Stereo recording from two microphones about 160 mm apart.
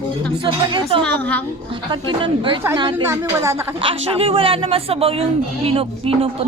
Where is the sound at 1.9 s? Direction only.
30° right (ahead or behind).